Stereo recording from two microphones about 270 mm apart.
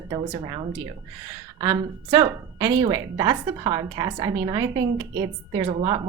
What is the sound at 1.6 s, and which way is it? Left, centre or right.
A woman's voice, centre.